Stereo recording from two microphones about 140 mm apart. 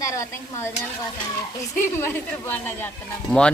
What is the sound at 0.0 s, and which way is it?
Stir, 20° left (ahead or behind).